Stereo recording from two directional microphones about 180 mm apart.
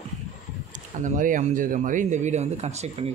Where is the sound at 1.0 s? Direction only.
45° right (ahead or behind).